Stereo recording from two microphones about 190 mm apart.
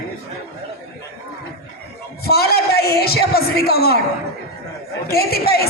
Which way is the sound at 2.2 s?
55° left (ahead or behind).